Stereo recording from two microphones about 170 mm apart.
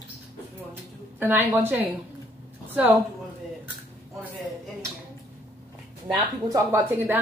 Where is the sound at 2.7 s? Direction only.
10° right (ahead or behind).